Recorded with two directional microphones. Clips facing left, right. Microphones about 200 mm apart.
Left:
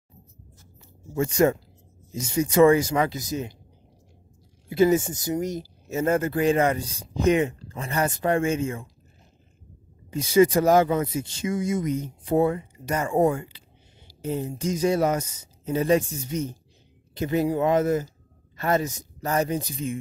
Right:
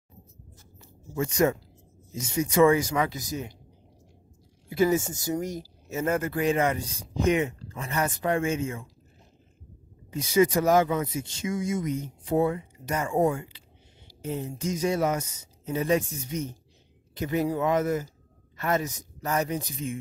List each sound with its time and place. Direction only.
1.3 s speech: 30° left (ahead or behind)
4.6 s speech: 25° left (ahead or behind)
10.1 s speech: 30° left (ahead or behind)